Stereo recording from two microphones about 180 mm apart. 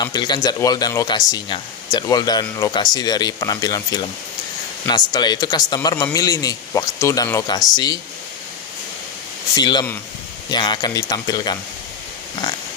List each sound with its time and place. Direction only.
0.0 s speech: 25° left (ahead or behind)
9.6 s speech: 25° left (ahead or behind)